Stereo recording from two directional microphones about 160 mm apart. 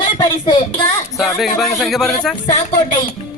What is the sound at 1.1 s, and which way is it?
Speech, centre (ahead or behind).